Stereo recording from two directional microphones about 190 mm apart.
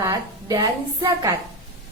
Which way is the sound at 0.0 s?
15° right (ahead or behind).